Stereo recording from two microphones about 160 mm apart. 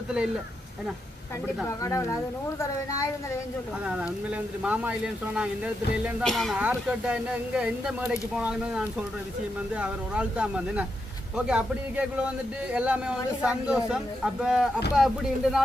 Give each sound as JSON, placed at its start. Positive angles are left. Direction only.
{"t": 1.6, "sound": "speech", "side_deg": 20}
{"t": 3.8, "sound": "speech", "side_deg": -5}